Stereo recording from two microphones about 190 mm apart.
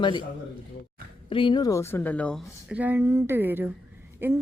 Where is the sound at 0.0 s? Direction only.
25° left (ahead or behind).